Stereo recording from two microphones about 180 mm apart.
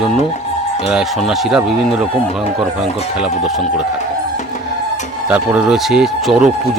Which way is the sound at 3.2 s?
Centre (ahead or behind).